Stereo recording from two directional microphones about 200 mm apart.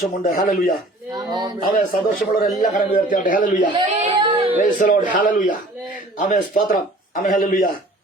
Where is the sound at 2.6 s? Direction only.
40° left (ahead or behind).